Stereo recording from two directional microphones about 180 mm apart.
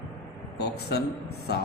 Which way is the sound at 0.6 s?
65° left (ahead or behind).